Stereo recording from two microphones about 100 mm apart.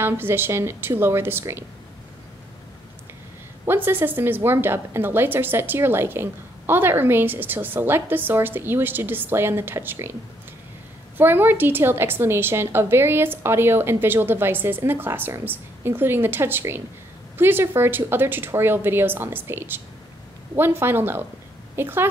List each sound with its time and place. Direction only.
0.0 s a woman's voice: 20° right (ahead or behind)
3.6 s a woman's voice: 20° right (ahead or behind)
11.1 s a woman's voice: 20° right (ahead or behind)